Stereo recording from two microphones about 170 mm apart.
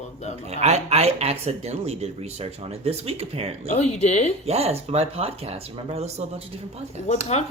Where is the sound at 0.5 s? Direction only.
40° right (ahead or behind).